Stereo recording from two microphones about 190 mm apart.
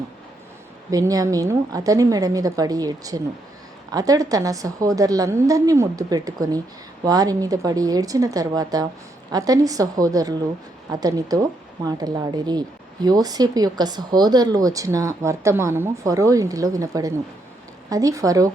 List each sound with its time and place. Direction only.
0.9 s speech: 20° right (ahead or behind)